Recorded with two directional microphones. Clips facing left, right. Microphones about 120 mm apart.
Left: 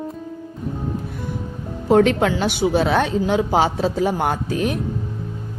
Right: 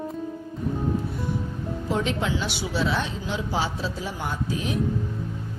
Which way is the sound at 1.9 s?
60° left (ahead or behind).